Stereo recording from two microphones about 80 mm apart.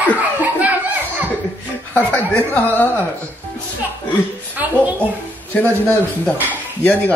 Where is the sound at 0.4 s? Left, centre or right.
Centre.